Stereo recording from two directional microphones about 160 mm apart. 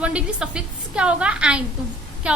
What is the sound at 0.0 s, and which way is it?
A woman's voice, 5° right (ahead or behind).